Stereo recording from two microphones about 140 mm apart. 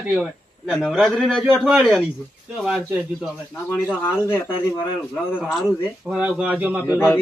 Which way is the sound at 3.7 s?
15° left (ahead or behind).